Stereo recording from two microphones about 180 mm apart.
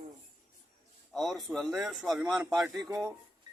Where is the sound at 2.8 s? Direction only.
20° right (ahead or behind).